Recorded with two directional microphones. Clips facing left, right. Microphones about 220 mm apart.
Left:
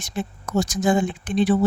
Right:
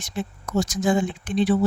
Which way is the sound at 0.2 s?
50° left (ahead or behind).